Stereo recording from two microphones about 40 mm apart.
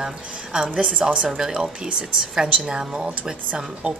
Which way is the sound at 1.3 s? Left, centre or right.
Centre.